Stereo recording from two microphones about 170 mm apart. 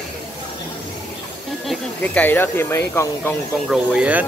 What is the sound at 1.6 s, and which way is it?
Speech, 5° left (ahead or behind).